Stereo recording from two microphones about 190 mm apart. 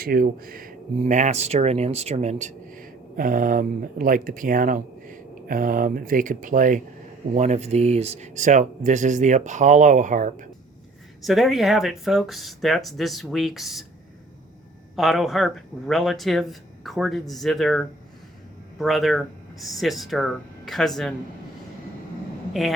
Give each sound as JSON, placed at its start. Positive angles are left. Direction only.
{"t": 0.0, "sound": "speech", "side_deg": -50}
{"t": 11.3, "sound": "speech", "side_deg": 0}
{"t": 14.9, "sound": "speech", "side_deg": 0}